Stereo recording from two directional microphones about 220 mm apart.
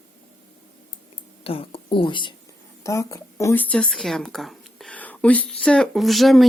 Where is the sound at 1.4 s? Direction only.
25° left (ahead or behind).